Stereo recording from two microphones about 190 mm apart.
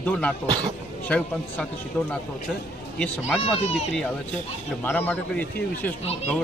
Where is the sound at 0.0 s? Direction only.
5° left (ahead or behind).